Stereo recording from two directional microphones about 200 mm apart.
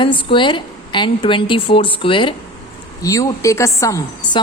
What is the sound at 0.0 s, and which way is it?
A woman's voice, 25° left (ahead or behind).